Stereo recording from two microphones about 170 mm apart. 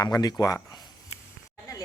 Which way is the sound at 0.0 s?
20° left (ahead or behind).